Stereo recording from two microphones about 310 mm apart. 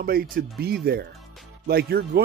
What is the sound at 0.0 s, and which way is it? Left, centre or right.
Speech, right.